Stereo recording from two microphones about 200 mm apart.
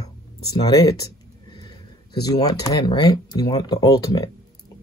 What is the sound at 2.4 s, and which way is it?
Speech, 20° left (ahead or behind).